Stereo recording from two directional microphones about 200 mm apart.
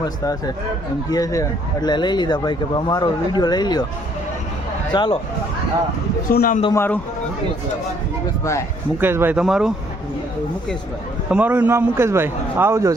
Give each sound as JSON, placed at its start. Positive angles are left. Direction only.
{"t": 0.0, "sound": "speech", "side_deg": 20}
{"t": 4.9, "sound": "speech", "side_deg": 25}
{"t": 6.3, "sound": "a man's voice", "side_deg": 50}
{"t": 6.7, "sound": "speech", "side_deg": 10}
{"t": 9.0, "sound": "a man's voice", "side_deg": -10}
{"t": 11.3, "sound": "a man's voice", "side_deg": -10}